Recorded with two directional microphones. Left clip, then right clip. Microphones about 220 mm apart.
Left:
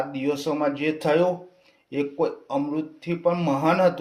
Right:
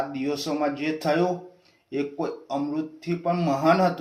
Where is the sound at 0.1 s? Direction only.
45° left (ahead or behind).